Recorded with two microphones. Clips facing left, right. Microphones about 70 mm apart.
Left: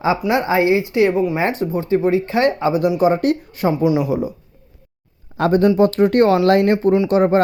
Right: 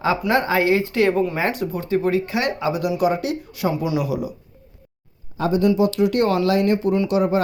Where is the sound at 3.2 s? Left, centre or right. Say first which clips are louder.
Left 5 dB; left.